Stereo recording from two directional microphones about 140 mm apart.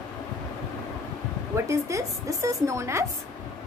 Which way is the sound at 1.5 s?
20° right (ahead or behind).